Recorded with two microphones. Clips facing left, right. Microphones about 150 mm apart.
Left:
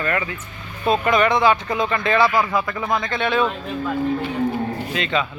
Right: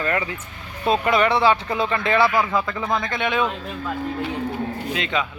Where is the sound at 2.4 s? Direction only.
10° left (ahead or behind).